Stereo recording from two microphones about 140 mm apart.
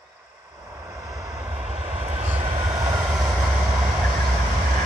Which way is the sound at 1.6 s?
55° right (ahead or behind).